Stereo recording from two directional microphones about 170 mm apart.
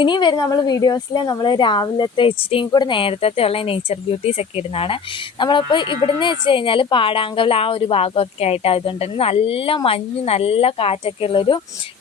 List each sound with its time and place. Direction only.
0.0 s a woman's voice: 25° left (ahead or behind)